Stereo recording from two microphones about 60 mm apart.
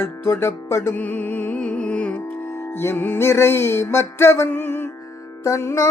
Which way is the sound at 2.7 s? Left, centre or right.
Left.